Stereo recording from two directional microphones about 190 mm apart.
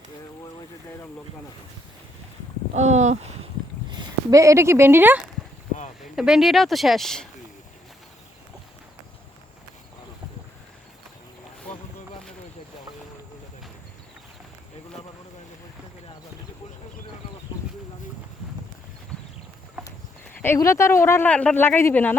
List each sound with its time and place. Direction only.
2.7 s speech: 35° right (ahead or behind)
3.8 s speech: 20° right (ahead or behind); by 7.3 s centre (ahead or behind)
20.4 s speech: 15° left (ahead or behind)